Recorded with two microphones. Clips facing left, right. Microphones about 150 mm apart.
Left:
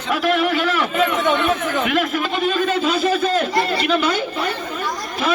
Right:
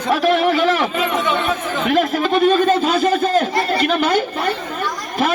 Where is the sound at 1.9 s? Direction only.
35° right (ahead or behind).